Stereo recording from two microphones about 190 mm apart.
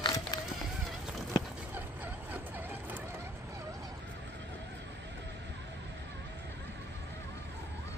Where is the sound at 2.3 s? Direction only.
10° right (ahead or behind).